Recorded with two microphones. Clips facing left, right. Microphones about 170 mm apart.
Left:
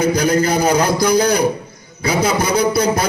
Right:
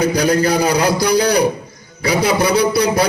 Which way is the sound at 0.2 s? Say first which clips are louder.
Right 1 dB; 45° left (ahead or behind).